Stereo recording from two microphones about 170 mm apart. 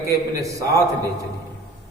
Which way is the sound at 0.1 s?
20° right (ahead or behind).